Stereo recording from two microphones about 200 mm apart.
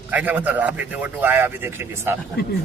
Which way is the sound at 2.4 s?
55° left (ahead or behind).